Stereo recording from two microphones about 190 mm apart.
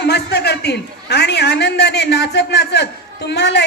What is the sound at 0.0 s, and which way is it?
A man's voice, 60° left (ahead or behind).